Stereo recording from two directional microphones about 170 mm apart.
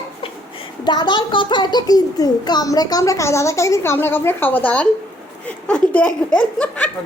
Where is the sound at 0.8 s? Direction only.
25° left (ahead or behind).